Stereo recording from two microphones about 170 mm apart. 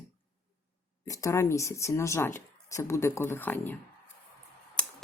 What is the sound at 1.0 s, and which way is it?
Speech, 20° left (ahead or behind).